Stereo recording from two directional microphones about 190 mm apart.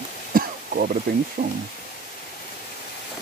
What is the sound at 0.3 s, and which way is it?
Throat clearing, 50° right (ahead or behind).